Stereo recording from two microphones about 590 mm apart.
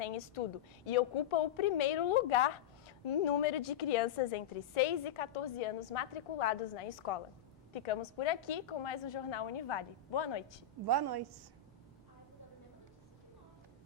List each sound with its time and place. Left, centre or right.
0.9 s a woman's voice: left
7.9 s a woman's voice: left
10.8 s a woman's voice: right